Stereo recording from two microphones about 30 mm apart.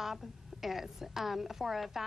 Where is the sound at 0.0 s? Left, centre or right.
Centre.